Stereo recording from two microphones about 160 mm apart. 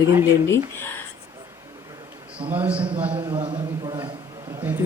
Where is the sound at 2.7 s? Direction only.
35° right (ahead or behind).